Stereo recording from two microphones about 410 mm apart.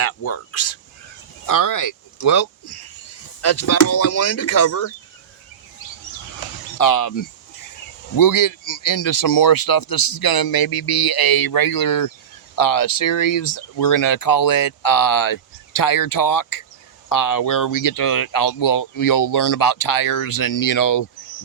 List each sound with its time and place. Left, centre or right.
0.0 s speech: left
1.5 s speech: left
6.7 s speech: left